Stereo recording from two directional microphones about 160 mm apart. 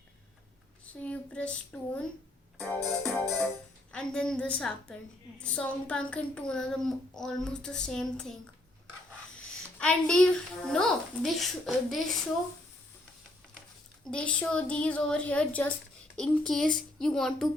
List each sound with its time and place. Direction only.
1.0 s a woman's voice: 10° left (ahead or behind)
9.4 s speech: 5° left (ahead or behind)
14.0 s a woman's voice: 5° left (ahead or behind)